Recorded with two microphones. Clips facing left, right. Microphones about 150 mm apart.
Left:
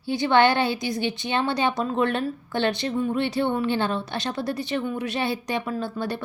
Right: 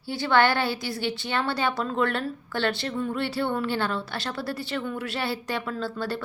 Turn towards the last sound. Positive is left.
turn(degrees=15)  # may be behind; listen again after turning